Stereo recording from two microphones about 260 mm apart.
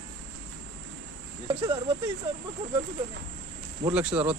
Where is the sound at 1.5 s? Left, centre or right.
Right.